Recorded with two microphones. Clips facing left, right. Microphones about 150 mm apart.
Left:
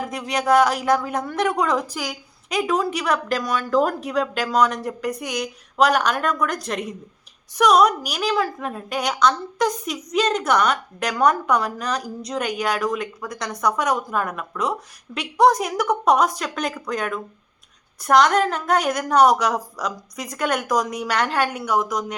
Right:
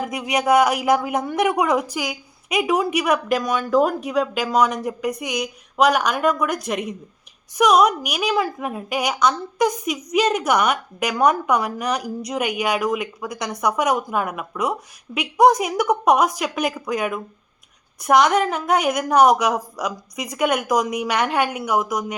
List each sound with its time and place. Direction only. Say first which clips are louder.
0.1 s a woman's voice: right 1 dB; 15° right (ahead or behind)
1.9 s a woman's voice: right 3 dB; 5° right (ahead or behind)